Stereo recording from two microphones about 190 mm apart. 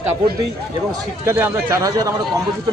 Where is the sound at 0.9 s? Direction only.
15° right (ahead or behind).